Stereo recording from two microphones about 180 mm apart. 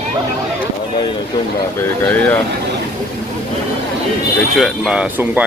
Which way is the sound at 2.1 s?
10° left (ahead or behind).